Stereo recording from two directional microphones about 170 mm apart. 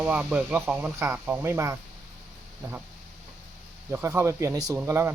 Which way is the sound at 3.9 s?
15° right (ahead or behind).